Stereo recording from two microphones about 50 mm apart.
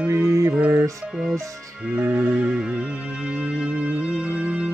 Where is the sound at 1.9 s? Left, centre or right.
Right.